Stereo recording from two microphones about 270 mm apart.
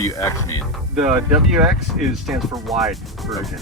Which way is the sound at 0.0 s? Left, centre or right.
Centre.